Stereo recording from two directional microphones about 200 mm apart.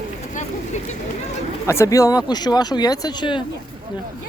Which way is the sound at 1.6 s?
15° left (ahead or behind).